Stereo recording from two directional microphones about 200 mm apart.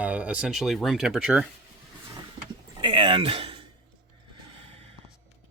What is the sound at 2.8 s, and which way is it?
Speech, 25° right (ahead or behind).